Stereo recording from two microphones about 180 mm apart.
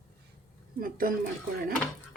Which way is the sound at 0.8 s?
50° right (ahead or behind).